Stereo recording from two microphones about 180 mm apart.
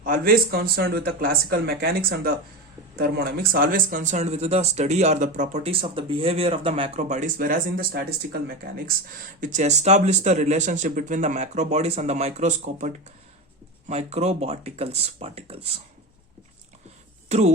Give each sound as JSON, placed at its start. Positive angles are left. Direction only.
{"t": 0.0, "sound": "speech", "side_deg": -50}
{"t": 7.3, "sound": "speech", "side_deg": -50}
{"t": 9.4, "sound": "speech", "side_deg": -45}
{"t": 17.2, "sound": "speech", "side_deg": -35}